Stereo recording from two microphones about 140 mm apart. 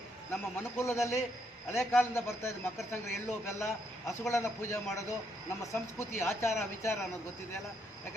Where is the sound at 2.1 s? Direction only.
20° left (ahead or behind).